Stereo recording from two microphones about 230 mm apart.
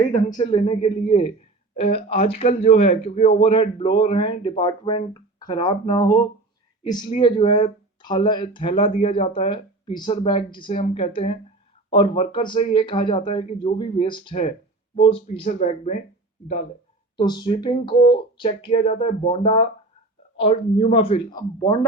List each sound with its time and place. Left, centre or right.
0.1 s speech: centre
17.2 s speech: centre